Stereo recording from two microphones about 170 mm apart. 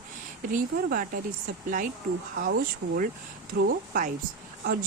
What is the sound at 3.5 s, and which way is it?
Speech, 55° right (ahead or behind).